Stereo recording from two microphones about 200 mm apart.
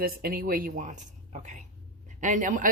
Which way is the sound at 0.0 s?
50° right (ahead or behind).